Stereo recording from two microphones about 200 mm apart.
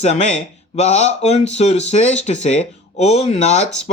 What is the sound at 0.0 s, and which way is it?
Speech, 35° left (ahead or behind).